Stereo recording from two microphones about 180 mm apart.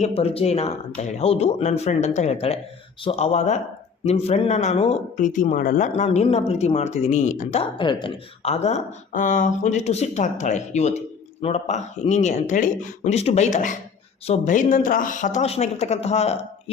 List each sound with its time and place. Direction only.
0.0 s speech: 35° left (ahead or behind)
7.6 s speech: 25° left (ahead or behind)